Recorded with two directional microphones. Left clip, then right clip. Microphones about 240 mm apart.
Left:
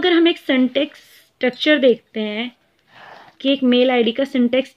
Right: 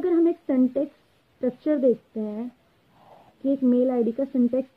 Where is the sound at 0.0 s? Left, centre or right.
Left.